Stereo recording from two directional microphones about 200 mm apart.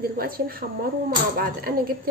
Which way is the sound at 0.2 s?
45° right (ahead or behind).